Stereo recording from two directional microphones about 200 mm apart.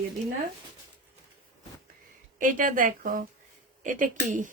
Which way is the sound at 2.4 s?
40° right (ahead or behind).